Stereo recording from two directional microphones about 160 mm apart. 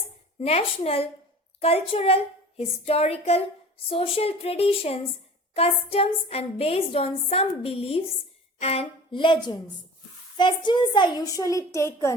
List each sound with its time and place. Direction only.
0.3 s a woman's voice: 40° left (ahead or behind); by 12.1 s 20° left (ahead or behind)